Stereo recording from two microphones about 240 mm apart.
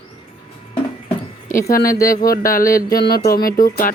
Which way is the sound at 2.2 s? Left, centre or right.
Left.